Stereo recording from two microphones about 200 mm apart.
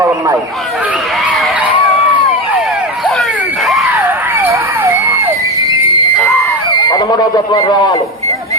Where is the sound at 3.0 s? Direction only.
Centre (ahead or behind).